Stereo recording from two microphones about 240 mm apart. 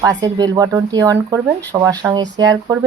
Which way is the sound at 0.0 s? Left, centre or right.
Centre.